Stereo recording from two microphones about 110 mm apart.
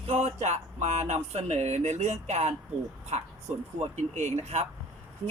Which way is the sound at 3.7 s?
90° right.